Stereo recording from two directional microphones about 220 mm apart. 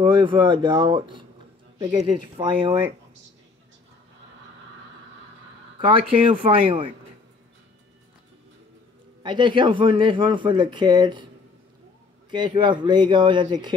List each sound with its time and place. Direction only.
0.0 s speech: 20° right (ahead or behind)
5.8 s speech: 25° right (ahead or behind)
9.2 s speech: 20° right (ahead or behind)
12.3 s speech: 20° right (ahead or behind)